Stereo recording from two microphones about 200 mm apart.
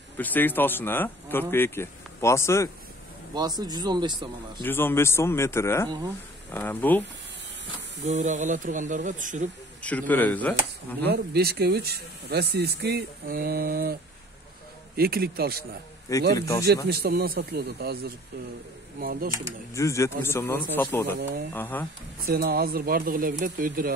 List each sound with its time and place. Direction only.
0.2 s speech: 10° left (ahead or behind)
3.3 s speech: 20° right (ahead or behind)
4.6 s speech: 10° left (ahead or behind)
8.0 s speech: 35° right (ahead or behind)
9.8 s speech: 5° left (ahead or behind)
11.1 s speech: 55° right (ahead or behind)
15.0 s speech: 50° right (ahead or behind)
16.3 s speech: 15° left (ahead or behind)
16.6 s speech: 55° right (ahead or behind)
19.7 s speech: 15° left (ahead or behind)
21.2 s speech: 60° right (ahead or behind)
21.5 s speech: 10° left (ahead or behind)
22.2 s speech: 50° right (ahead or behind)